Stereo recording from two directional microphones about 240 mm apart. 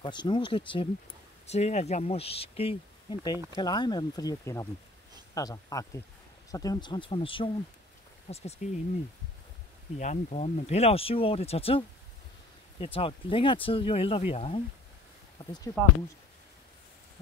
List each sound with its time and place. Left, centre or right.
0.0 s speech: centre
9.9 s speech: left
12.8 s speech: left
15.8 s speech: centre